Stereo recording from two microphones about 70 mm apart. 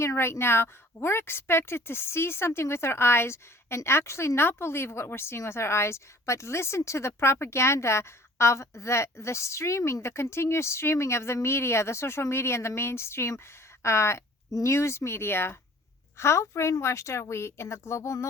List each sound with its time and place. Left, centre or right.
0.0 s a woman's voice: left